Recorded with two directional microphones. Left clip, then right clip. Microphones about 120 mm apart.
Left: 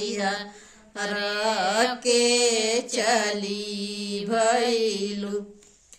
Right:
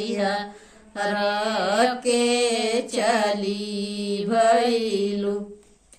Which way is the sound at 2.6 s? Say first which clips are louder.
Right 2 dB; 35° left (ahead or behind).